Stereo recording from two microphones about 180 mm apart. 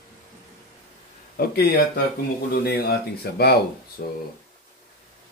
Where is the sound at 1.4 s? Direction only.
60° left (ahead or behind).